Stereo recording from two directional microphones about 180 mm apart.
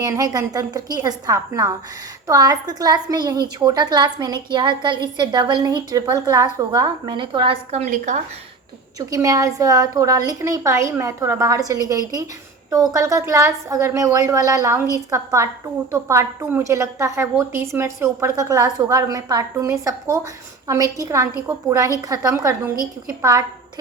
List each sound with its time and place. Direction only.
0.0 s a woman's voice: 20° right (ahead or behind); by 8.2 s 40° right (ahead or behind)
9.0 s a woman's voice: 20° right (ahead or behind)